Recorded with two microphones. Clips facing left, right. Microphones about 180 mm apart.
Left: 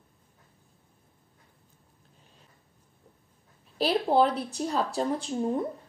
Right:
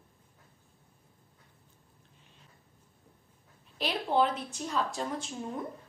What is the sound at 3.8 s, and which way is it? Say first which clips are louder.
Speech: left 5 dB; 35° left (ahead or behind).